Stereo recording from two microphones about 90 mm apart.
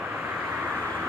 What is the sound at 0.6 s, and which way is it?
Vehicle, 20° right (ahead or behind).